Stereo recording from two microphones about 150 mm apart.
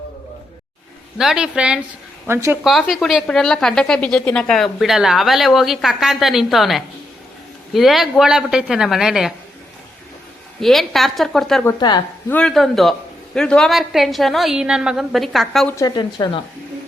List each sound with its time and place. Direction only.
1.2 s a woman's voice: 5° right (ahead or behind)
2.2 s a woman's voice: 15° right (ahead or behind)
2.6 s a woman's voice: centre (ahead or behind)
10.6 s a woman's voice: centre (ahead or behind)
11.8 s a woman's voice: 30° left (ahead or behind)
12.3 s a woman's voice: 5° left (ahead or behind)
15.6 s a woman's voice: 20° left (ahead or behind)